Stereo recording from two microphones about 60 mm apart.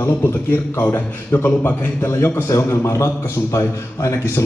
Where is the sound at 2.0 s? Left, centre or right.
Left.